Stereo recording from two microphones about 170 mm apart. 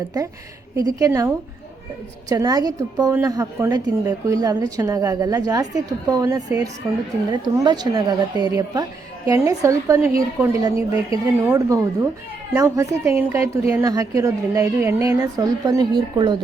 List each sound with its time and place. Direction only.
0.1 s speech: 25° right (ahead or behind)